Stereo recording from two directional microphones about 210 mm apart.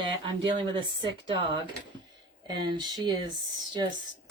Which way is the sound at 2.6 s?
20° right (ahead or behind).